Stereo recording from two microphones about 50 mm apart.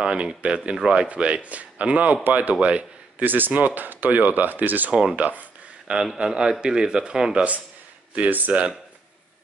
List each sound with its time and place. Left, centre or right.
0.0 s speech: centre
1.0 s speech: right
2.5 s a man's voice: right
3.3 s speech: right
6.1 s speech: centre; by 8.5 s right